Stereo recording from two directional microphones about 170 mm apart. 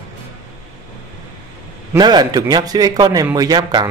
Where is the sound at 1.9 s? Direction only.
25° right (ahead or behind).